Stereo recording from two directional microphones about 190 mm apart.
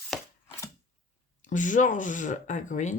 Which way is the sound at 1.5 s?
40° left (ahead or behind).